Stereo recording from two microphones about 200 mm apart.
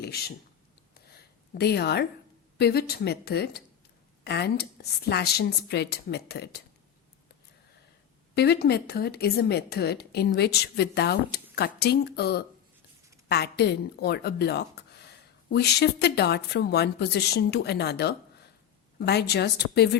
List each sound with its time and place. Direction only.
0.0 s speech: 50° left (ahead or behind)
1.5 s a woman's voice: 55° left (ahead or behind)
8.4 s a woman's voice: 55° left (ahead or behind)